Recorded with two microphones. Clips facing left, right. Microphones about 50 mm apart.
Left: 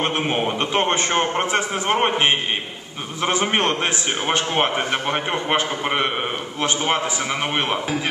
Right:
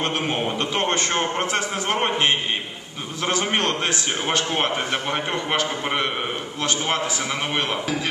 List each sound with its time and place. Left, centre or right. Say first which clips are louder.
0.0 s a man's voice: left 2 dB; left